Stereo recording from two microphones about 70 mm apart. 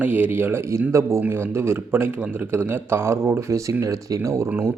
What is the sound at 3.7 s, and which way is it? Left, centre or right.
Speech, right.